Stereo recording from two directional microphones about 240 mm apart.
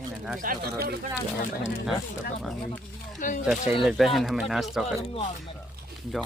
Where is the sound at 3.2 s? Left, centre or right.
Left.